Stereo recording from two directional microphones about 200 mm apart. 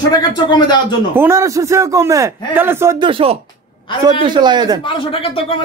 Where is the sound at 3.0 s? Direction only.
25° right (ahead or behind).